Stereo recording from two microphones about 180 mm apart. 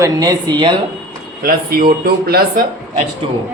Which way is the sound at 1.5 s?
55° right (ahead or behind).